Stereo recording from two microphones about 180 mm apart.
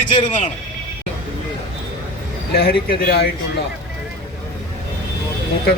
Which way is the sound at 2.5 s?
60° left (ahead or behind).